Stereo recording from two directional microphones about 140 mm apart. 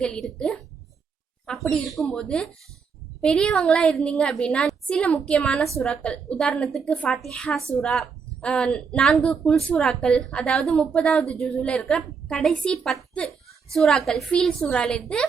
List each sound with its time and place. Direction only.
0.0 s a woman's voice: 5° left (ahead or behind)